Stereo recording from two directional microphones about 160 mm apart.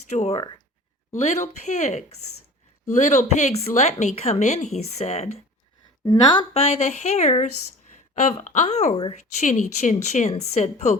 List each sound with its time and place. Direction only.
0.1 s speech: 45° left (ahead or behind)
6.1 s speech: 30° left (ahead or behind); by 10.9 s 45° left (ahead or behind)